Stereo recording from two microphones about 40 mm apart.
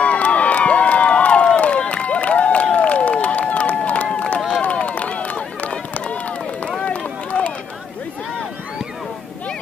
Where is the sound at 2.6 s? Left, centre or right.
Left.